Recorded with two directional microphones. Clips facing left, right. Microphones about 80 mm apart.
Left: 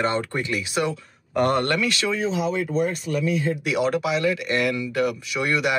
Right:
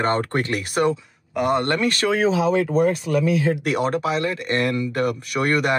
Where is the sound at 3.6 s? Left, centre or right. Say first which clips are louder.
Right 1 dB; right.